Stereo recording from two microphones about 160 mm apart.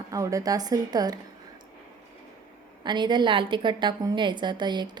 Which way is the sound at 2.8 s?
30° right (ahead or behind).